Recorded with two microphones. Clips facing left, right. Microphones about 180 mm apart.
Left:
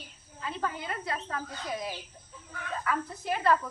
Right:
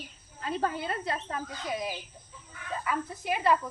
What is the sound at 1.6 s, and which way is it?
Speech, 10° right (ahead or behind).